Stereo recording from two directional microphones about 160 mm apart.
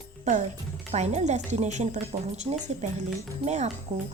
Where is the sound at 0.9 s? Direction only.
45° right (ahead or behind).